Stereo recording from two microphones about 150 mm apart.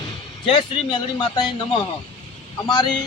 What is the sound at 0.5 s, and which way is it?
Speech, 35° left (ahead or behind).